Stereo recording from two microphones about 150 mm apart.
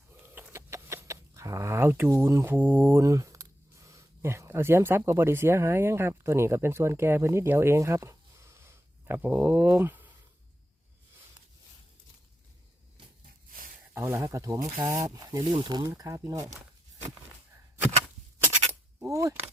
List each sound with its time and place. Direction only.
0.3 s speech: 15° right (ahead or behind)
13.9 s speech: 15° right (ahead or behind)
18.7 s a sound: 20° right (ahead or behind)